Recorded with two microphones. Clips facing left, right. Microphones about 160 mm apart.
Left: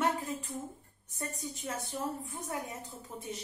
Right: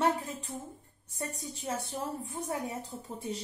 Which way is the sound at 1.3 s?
30° right (ahead or behind).